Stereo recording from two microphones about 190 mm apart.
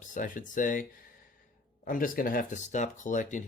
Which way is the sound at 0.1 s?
45° left (ahead or behind).